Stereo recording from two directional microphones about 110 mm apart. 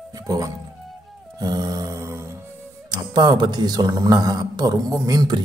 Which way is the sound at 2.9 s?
40° right (ahead or behind).